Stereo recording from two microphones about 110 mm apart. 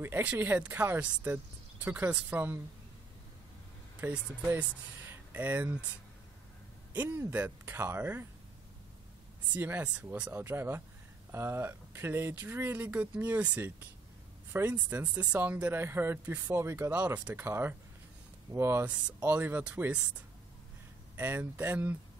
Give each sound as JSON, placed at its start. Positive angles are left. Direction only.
{"t": 0.0, "sound": "speech", "side_deg": -15}
{"t": 4.0, "sound": "speech", "side_deg": -15}
{"t": 6.9, "sound": "speech", "side_deg": -15}
{"t": 9.5, "sound": "speech", "side_deg": -15}
{"t": 21.2, "sound": "speech", "side_deg": -20}